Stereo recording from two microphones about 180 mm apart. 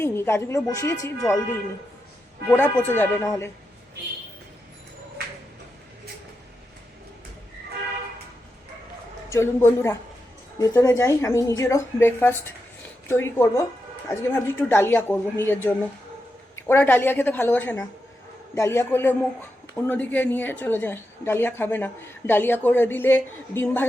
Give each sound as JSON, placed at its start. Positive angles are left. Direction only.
{"t": 0.0, "sound": "a man's voice", "side_deg": 15}
{"t": 2.5, "sound": "a man's voice", "side_deg": 10}
{"t": 9.3, "sound": "a man's voice", "side_deg": 15}